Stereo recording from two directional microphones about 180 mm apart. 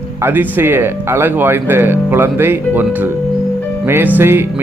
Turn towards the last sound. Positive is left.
turn(degrees=-15)  # may be behind; listen again after turning